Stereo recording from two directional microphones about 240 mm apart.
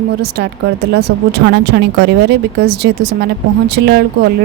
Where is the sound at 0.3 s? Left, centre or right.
Right.